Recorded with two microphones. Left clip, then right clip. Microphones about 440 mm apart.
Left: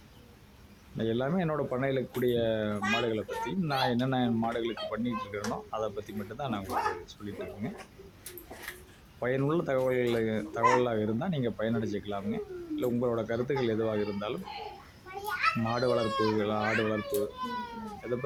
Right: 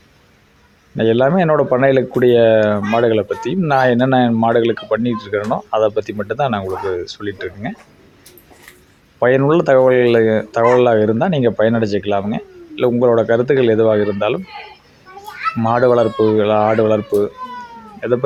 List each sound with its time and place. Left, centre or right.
0.9 s speech: left
9.2 s speech: left
15.2 s children playing: centre
15.6 s speech: left
17.1 s speech: centre
18.0 s speech: left